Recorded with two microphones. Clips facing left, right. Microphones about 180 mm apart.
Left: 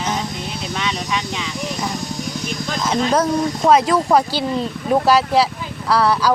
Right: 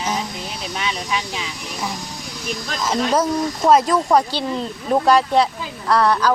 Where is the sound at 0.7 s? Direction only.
10° right (ahead or behind).